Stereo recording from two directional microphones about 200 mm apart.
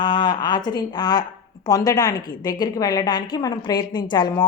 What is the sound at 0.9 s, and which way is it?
A woman's voice, 20° left (ahead or behind).